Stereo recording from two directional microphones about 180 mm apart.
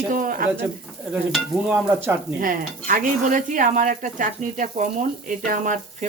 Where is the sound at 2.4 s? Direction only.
50° right (ahead or behind).